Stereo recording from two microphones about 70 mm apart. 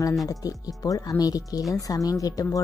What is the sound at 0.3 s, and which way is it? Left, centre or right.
A woman's voice, left.